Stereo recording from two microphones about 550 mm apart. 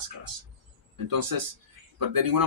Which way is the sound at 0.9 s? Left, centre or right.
Right.